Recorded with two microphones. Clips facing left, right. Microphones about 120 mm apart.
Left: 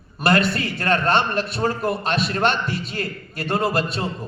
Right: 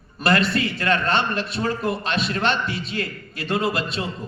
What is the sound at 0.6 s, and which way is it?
A man's voice, 40° left (ahead or behind).